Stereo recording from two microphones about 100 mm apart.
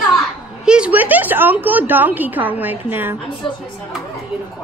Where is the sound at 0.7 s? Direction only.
10° right (ahead or behind).